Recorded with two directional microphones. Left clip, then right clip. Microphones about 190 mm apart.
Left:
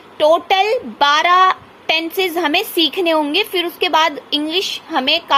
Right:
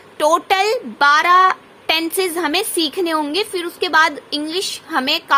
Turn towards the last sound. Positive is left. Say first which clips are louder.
# left 2 dB
turn(degrees=-10)  # may be behind; listen again after turning